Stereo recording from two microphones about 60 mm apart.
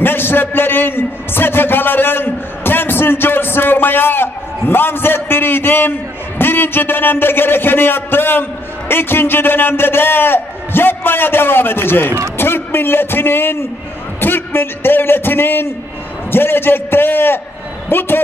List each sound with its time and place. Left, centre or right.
0.0 s a man's voice: left